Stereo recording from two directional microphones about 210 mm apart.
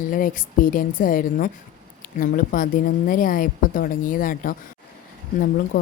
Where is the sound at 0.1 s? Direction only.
40° left (ahead or behind).